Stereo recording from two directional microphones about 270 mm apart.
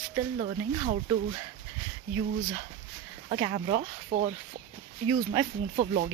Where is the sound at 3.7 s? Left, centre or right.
Right.